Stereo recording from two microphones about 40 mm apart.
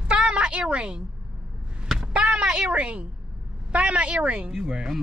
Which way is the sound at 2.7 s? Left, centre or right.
Right.